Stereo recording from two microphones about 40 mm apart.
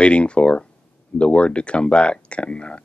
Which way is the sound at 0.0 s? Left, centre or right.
Left.